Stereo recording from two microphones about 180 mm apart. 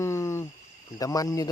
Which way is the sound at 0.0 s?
15° left (ahead or behind).